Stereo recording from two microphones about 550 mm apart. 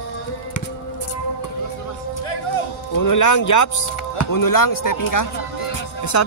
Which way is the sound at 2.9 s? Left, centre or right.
Left.